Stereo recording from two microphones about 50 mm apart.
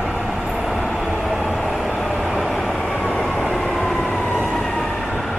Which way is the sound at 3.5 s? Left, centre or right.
Centre.